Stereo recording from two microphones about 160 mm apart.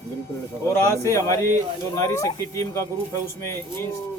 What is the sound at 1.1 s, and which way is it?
A man's voice, 20° left (ahead or behind).